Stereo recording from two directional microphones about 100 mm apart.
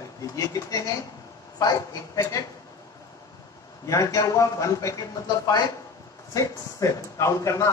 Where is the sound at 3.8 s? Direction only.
35° left (ahead or behind).